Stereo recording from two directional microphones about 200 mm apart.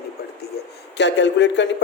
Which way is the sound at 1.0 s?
65° left (ahead or behind).